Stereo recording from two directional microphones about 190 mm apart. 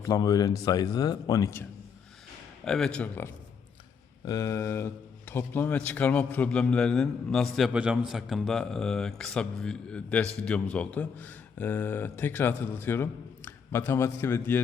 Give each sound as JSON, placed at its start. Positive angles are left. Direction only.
{"t": 0.0, "sound": "speech", "side_deg": 20}
{"t": 2.6, "sound": "speech", "side_deg": 5}